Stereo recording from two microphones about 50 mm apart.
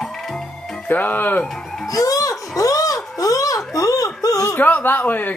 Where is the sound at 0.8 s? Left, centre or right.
Left.